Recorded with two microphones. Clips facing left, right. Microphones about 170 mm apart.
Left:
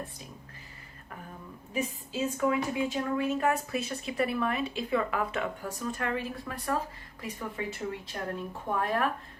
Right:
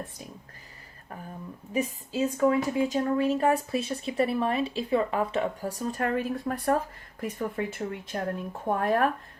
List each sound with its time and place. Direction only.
1.7 s a woman's voice: 35° right (ahead or behind)